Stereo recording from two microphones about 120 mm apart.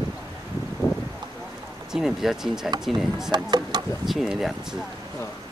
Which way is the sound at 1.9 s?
5° right (ahead or behind).